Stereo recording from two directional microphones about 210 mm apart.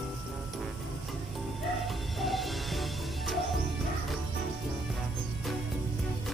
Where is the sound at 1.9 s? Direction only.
Centre (ahead or behind).